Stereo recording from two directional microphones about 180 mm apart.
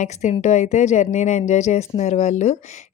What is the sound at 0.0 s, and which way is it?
Speech, 40° left (ahead or behind).